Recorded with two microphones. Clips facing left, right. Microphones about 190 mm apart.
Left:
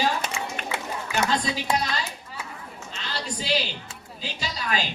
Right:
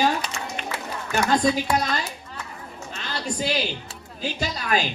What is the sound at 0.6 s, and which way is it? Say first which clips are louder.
Run: right 1 dB; 50° left (ahead or behind).